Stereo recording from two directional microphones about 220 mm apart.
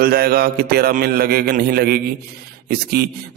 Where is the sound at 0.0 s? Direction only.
45° right (ahead or behind).